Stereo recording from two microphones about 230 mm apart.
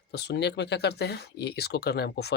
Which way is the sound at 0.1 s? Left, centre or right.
Left.